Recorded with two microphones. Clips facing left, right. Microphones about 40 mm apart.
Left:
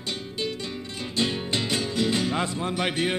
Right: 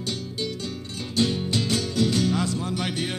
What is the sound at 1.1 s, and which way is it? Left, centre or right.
Music, left.